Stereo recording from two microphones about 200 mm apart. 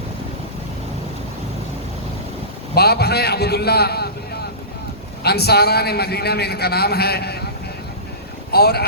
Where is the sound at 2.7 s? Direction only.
50° left (ahead or behind).